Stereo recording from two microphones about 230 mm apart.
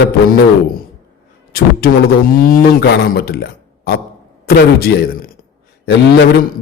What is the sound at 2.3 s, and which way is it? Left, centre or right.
A man's voice, left.